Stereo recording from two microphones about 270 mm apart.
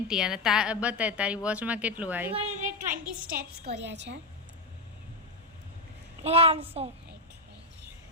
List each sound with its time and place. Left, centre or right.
0.1 s a woman's voice: centre
2.3 s a woman's voice: right
6.2 s a child's voice: right